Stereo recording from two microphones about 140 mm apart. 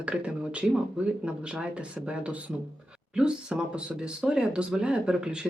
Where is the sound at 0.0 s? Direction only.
10° right (ahead or behind).